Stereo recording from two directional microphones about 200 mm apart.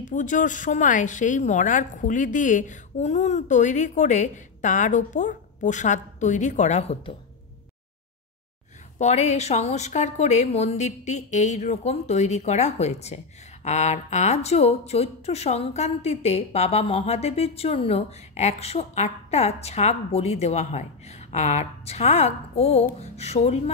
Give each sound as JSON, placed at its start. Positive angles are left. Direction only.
{"t": 0.0, "sound": "a woman's voice", "side_deg": 40}
{"t": 8.9, "sound": "a woman's voice", "side_deg": 35}